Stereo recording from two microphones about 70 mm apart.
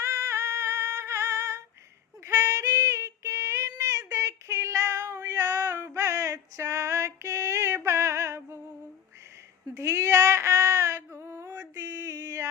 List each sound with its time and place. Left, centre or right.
0.0 s singing: right
2.2 s female singing: right
9.7 s female singing: right
11.7 s a sound: right